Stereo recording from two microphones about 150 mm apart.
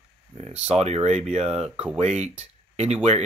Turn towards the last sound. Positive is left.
turn(degrees=-45)  # may be behind; listen again after turning